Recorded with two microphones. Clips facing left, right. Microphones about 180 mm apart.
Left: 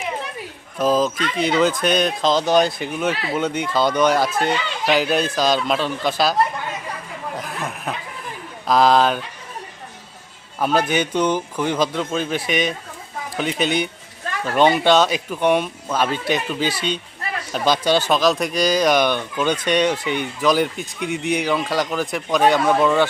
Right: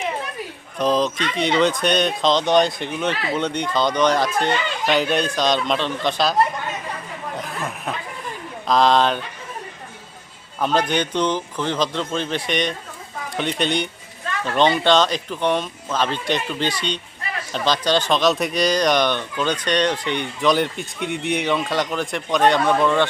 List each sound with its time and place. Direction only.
0.8 s speech: 5° left (ahead or behind)
7.3 s a sound: centre (ahead or behind)
8.6 s speech: 5° left (ahead or behind)
10.6 s speech: 10° left (ahead or behind)